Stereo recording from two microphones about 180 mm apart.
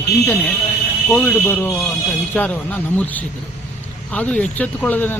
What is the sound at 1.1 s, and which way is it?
Speech, 10° left (ahead or behind).